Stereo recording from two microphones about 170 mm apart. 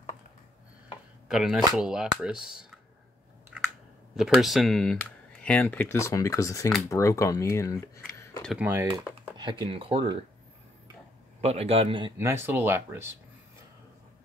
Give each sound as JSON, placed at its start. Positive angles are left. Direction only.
{"t": 1.3, "sound": "speech", "side_deg": 0}
{"t": 3.5, "sound": "chewing", "side_deg": -5}
{"t": 4.2, "sound": "speech", "side_deg": 0}
{"t": 8.5, "sound": "speech", "side_deg": -15}
{"t": 9.4, "sound": "speech", "side_deg": -30}
{"t": 11.4, "sound": "a man's voice", "side_deg": -35}
{"t": 12.2, "sound": "speech", "side_deg": -15}